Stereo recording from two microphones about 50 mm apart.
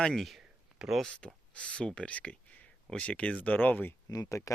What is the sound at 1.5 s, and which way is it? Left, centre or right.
Speech, left.